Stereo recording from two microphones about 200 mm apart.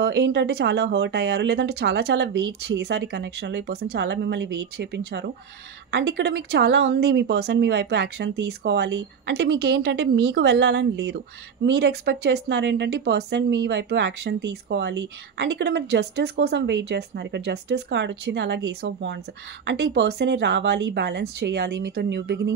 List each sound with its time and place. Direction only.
0.0 s a woman's voice: 55° right (ahead or behind)